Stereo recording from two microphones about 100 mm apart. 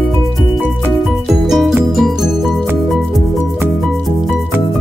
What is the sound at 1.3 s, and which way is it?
Music, centre (ahead or behind).